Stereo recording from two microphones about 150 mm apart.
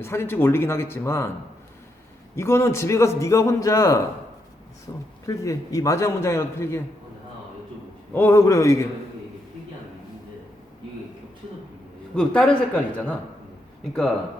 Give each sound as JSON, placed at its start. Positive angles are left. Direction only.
{"t": 0.0, "sound": "speech", "side_deg": 15}
{"t": 2.3, "sound": "a man's voice", "side_deg": 15}
{"t": 8.1, "sound": "a man's voice", "side_deg": 15}
{"t": 12.1, "sound": "speech", "side_deg": 5}